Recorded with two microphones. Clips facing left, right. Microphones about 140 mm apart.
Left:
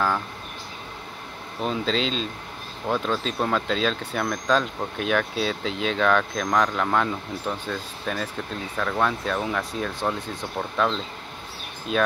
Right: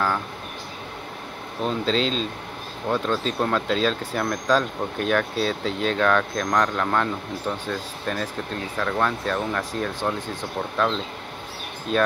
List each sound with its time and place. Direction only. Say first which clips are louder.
1.6 s speech: right 2 dB; centre (ahead or behind)
11.9 s speech: right 2 dB; centre (ahead or behind)